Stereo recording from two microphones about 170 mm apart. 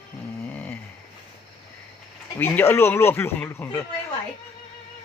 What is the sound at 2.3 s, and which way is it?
A man's voice, 15° left (ahead or behind).